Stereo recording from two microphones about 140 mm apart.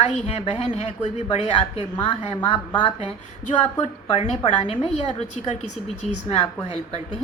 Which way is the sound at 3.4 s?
50° left (ahead or behind).